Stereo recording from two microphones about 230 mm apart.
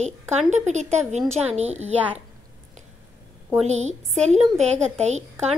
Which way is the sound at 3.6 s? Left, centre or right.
Right.